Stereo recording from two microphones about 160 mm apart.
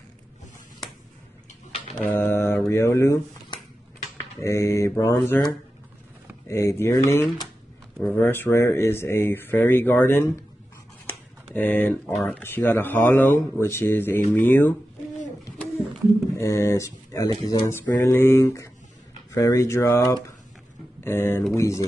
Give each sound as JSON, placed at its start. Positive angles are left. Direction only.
{"t": 2.0, "sound": "mantra", "side_deg": 15}
{"t": 4.4, "sound": "speech", "side_deg": 15}
{"t": 6.4, "sound": "speech", "side_deg": 15}
{"t": 11.5, "sound": "speech", "side_deg": 10}
{"t": 16.3, "sound": "speech", "side_deg": 15}